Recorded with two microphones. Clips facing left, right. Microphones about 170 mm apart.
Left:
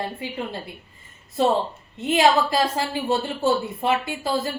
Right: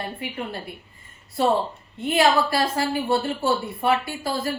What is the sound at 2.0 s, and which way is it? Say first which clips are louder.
A woman's voice: left 1 dB; 20° left (ahead or behind).